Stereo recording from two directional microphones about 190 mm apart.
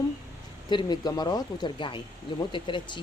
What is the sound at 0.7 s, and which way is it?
Speech, 20° left (ahead or behind).